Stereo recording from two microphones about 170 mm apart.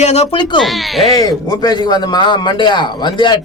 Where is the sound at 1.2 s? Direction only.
20° left (ahead or behind).